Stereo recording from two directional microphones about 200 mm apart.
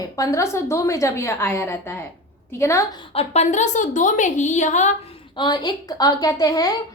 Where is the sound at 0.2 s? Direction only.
15° left (ahead or behind).